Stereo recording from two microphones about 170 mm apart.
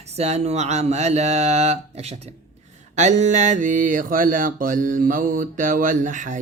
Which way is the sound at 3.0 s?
45° right (ahead or behind).